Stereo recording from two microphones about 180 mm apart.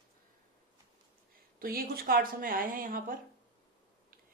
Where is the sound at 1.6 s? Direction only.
55° right (ahead or behind).